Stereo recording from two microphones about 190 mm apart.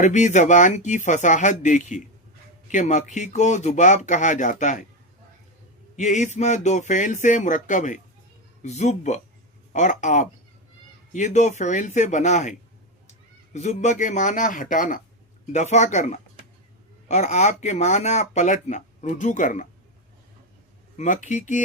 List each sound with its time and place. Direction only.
0.0 s speech: 40° left (ahead or behind)
6.0 s speech: 40° left (ahead or behind)
20.9 s speech: 40° left (ahead or behind)